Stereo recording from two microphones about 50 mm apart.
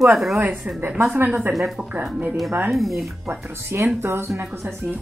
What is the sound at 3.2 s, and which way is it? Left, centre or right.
Speech, right.